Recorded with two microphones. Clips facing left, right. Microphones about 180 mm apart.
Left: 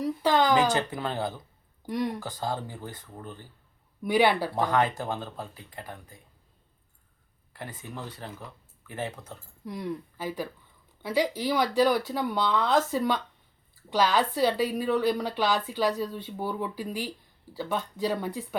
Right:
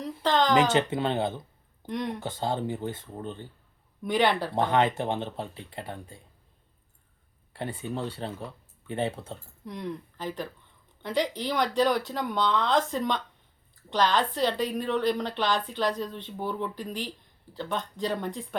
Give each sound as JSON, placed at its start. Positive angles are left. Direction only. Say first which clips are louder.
{"t": 0.0, "sound": "a sound", "louder": "left 1 dB", "side_deg": 10}
{"t": 0.7, "sound": "speech", "louder": "right 4 dB", "side_deg": -25}
{"t": 1.9, "sound": "speech", "louder": "left 2 dB", "side_deg": 0}
{"t": 2.1, "sound": "speech", "louder": "right 2 dB", "side_deg": -25}
{"t": 4.0, "sound": "a woman's voice", "louder": "left 2 dB", "side_deg": 5}
{"t": 4.5, "sound": "speech", "louder": "right 1 dB", "side_deg": -25}
{"t": 7.5, "sound": "speech", "louder": "right 7 dB", "side_deg": -30}
{"t": 9.6, "sound": "a woman's voice", "louder": "left 2 dB", "side_deg": 5}